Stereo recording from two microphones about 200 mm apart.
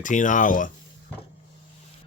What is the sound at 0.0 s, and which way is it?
Speech, 40° left (ahead or behind).